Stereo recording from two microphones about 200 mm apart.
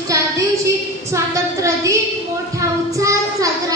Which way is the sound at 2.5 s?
15° right (ahead or behind).